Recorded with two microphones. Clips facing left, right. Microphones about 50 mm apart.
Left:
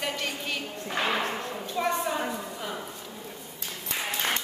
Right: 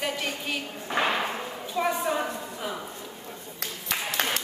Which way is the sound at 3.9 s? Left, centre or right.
Right.